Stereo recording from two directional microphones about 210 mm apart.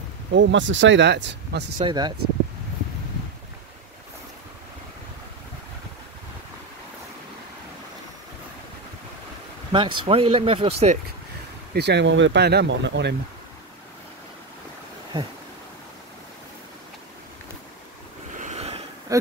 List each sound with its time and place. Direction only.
0.3 s speech: 60° right (ahead or behind)
1.8 s speech: 20° right (ahead or behind)
9.7 s speech: 25° right (ahead or behind)
11.7 s speech: 55° right (ahead or behind)
18.3 s a sound: 35° right (ahead or behind)